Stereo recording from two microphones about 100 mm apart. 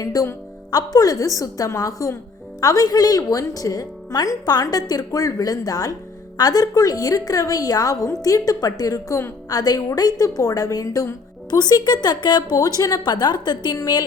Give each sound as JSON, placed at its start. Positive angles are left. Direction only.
{"t": 0.0, "sound": "a woman's voice", "side_deg": 35}